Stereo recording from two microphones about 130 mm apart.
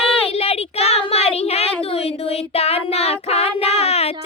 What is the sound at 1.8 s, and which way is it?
Child singing, 50° left (ahead or behind).